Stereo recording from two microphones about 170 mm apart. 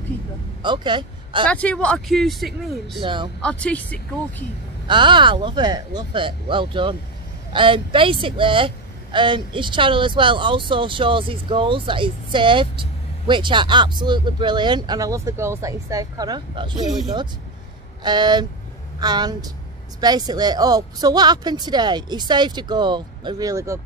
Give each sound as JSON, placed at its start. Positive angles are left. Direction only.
{"t": 0.6, "sound": "speech", "side_deg": -25}
{"t": 1.5, "sound": "speech", "side_deg": 5}
{"t": 3.0, "sound": "speech", "side_deg": -25}
{"t": 3.4, "sound": "speech", "side_deg": 5}
{"t": 4.8, "sound": "speech", "side_deg": -30}
{"t": 18.0, "sound": "speech", "side_deg": -25}